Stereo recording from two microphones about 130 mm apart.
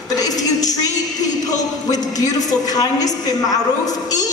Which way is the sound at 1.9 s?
30° left (ahead or behind).